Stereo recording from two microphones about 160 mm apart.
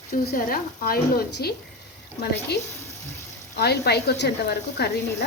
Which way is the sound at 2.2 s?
90° left.